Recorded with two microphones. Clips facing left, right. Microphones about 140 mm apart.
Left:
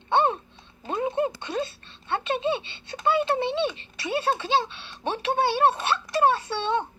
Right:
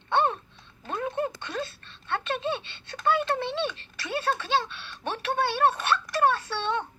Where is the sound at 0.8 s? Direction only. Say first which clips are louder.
Left 4 dB; 20° left (ahead or behind).